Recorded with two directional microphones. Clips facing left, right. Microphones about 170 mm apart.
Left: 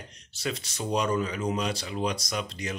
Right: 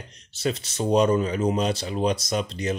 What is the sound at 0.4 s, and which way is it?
Speech, 25° right (ahead or behind).